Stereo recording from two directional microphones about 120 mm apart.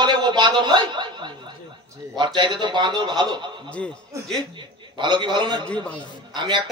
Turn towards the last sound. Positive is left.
turn(degrees=-40)  # may be behind; listen again after turning